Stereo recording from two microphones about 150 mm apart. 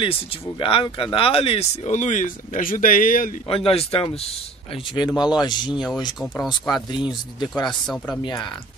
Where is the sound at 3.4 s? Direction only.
40° left (ahead or behind).